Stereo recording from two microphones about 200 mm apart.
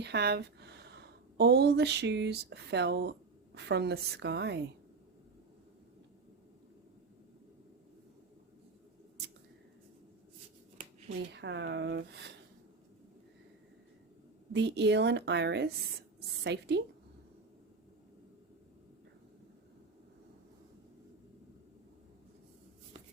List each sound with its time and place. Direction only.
0.0 s a woman's voice: 55° right (ahead or behind)
11.3 s a woman's voice: 60° right (ahead or behind)
14.5 s a woman's voice: 60° right (ahead or behind)